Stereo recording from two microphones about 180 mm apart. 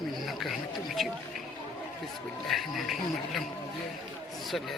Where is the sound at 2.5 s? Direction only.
Centre (ahead or behind).